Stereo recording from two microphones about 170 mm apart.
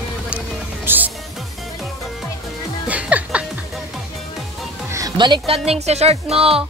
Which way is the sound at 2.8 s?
10° right (ahead or behind).